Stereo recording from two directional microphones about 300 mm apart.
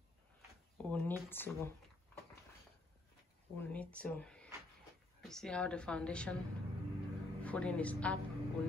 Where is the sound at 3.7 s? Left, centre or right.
Centre.